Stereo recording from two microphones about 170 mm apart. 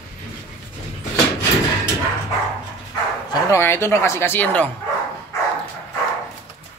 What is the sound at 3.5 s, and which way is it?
A woman's voice, 15° left (ahead or behind).